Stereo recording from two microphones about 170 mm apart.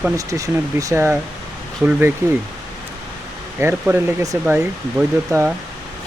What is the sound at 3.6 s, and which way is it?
Speech, 15° right (ahead or behind).